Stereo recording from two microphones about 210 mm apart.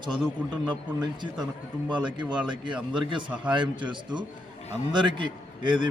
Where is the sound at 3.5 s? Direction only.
20° right (ahead or behind).